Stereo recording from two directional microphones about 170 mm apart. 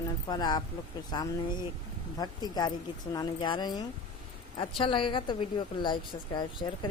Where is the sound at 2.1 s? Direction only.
25° left (ahead or behind).